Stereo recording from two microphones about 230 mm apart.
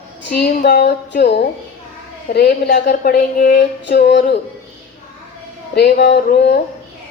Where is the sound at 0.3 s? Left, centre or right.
Left.